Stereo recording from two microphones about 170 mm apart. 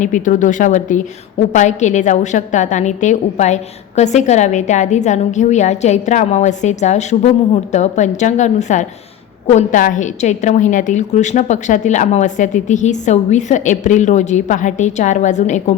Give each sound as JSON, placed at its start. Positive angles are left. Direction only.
{"t": 0.0, "sound": "a woman's voice", "side_deg": 45}